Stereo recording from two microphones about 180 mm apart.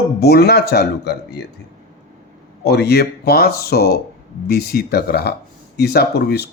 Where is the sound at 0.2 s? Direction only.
65° left (ahead or behind).